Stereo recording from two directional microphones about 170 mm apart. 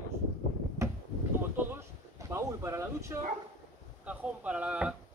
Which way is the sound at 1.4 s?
10° right (ahead or behind).